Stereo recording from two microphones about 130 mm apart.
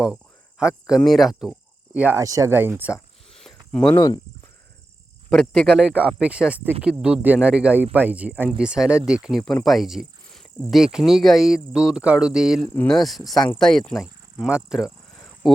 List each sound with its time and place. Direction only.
0.6 s speech: 5° right (ahead or behind)
2.1 s speech: 25° right (ahead or behind)
3.4 s a sound: 5° left (ahead or behind)
3.9 s speech: 35° left (ahead or behind)
5.3 s speech: 5° left (ahead or behind)